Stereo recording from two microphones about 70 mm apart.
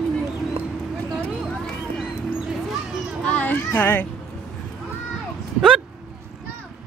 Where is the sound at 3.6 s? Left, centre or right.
Left.